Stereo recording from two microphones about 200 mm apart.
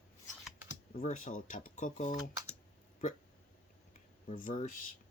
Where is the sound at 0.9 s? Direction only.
35° left (ahead or behind).